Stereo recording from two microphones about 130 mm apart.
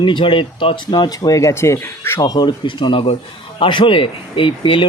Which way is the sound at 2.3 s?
35° left (ahead or behind).